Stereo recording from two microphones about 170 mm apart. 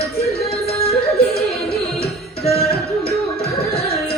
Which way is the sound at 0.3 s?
35° left (ahead or behind).